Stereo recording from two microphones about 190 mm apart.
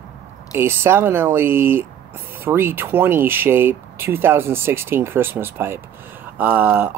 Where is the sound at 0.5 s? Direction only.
10° right (ahead or behind).